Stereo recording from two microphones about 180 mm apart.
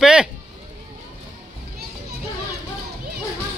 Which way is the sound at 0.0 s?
5° right (ahead or behind).